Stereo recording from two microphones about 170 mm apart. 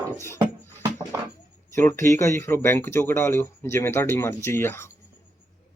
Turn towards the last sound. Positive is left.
turn(degrees=15)  # may be behind; listen again after turning